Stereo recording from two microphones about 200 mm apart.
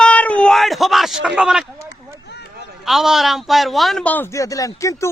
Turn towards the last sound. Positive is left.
turn(degrees=15)  # may be behind; listen again after turning